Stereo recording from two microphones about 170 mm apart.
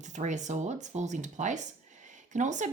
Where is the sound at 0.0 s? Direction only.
45° right (ahead or behind).